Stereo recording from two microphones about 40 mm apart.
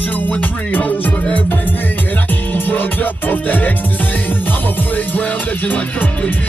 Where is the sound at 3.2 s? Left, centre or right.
Left.